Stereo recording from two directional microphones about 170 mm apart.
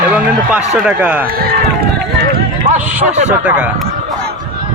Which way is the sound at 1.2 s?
60° right (ahead or behind).